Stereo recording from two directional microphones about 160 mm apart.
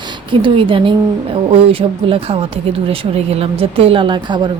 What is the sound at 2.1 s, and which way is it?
Speech, 35° right (ahead or behind).